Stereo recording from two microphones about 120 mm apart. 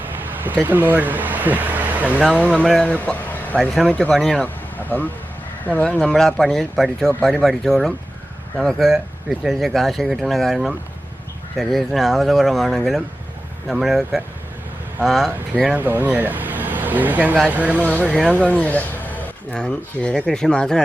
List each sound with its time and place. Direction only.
0.6 s speech: 15° right (ahead or behind)
2.6 s speech: 5° left (ahead or behind)
3.6 s speech: centre (ahead or behind)
4.4 s a sound: 15° left (ahead or behind)
5.6 s speech: 15° left (ahead or behind)
15.6 s speech: 15° right (ahead or behind)
17.7 s speech: 10° left (ahead or behind)
18.1 s speech: centre (ahead or behind)
18.3 s speech: 10° left (ahead or behind)